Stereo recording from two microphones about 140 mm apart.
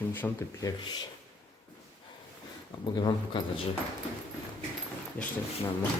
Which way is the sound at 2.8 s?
30° left (ahead or behind).